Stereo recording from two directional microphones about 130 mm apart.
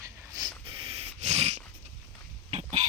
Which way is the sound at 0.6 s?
45° right (ahead or behind).